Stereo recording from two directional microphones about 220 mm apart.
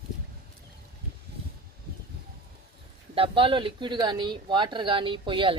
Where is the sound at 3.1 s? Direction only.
25° right (ahead or behind).